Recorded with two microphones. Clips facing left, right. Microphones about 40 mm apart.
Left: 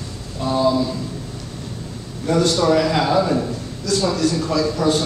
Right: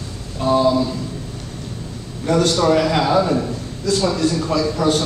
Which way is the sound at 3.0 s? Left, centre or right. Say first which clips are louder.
Right 1 dB; centre.